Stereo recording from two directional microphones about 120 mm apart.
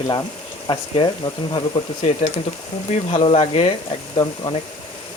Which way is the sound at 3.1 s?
50° left (ahead or behind).